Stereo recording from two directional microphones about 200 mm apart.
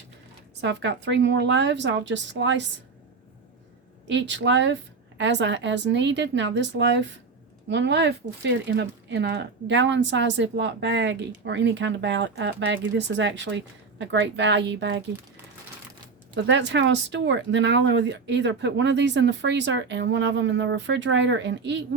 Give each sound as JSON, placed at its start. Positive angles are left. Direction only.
{"t": 0.6, "sound": "speech", "side_deg": -60}
{"t": 4.0, "sound": "speech", "side_deg": -65}
{"t": 16.3, "sound": "speech", "side_deg": -65}